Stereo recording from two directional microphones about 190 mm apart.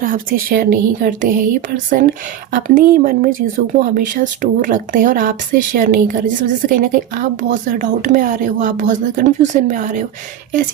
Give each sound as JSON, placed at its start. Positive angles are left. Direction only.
{"t": 0.0, "sound": "speech", "side_deg": -45}